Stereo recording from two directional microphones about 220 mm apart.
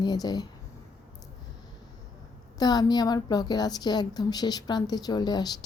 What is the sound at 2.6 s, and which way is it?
Speech, 15° left (ahead or behind).